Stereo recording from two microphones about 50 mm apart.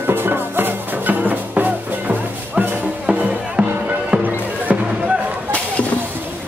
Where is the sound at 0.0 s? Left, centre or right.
Right.